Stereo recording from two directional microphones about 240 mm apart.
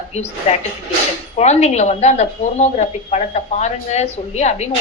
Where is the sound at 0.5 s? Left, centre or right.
Left.